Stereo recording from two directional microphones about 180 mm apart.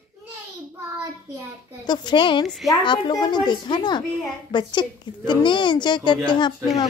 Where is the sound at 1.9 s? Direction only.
25° left (ahead or behind).